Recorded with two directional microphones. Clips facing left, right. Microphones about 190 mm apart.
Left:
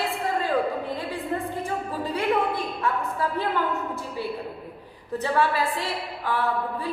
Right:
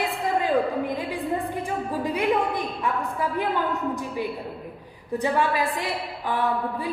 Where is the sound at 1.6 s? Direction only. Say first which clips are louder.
Right 2 dB; 15° right (ahead or behind).